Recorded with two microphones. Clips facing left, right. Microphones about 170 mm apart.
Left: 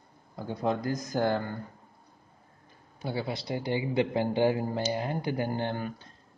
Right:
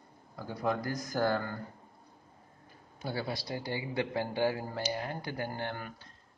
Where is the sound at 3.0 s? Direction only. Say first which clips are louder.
Left 3 dB; 20° left (ahead or behind).